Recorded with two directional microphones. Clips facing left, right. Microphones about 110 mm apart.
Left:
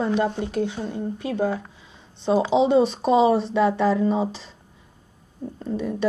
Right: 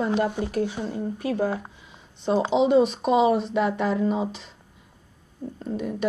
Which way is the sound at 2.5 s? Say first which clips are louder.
Even; 30° left (ahead or behind).